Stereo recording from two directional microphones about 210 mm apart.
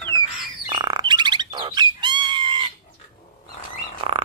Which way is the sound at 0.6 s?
20° right (ahead or behind).